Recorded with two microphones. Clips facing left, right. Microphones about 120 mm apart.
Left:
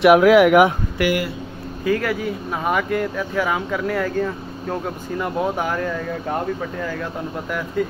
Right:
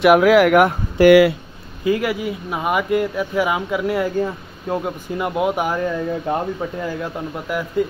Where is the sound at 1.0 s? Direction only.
90° right.